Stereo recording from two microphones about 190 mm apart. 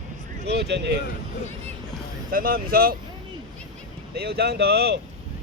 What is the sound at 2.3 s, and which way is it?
Speech, 50° right (ahead or behind).